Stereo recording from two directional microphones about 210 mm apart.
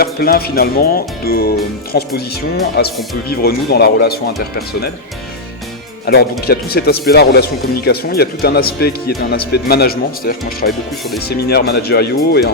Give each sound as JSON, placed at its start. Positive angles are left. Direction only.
{"t": 0.0, "sound": "speech", "side_deg": 45}
{"t": 6.4, "sound": "speech", "side_deg": 50}